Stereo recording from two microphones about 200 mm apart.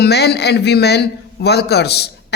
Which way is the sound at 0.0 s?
55° left (ahead or behind).